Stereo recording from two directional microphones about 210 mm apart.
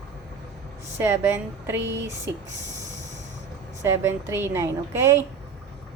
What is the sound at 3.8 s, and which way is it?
A woman's voice, 10° right (ahead or behind).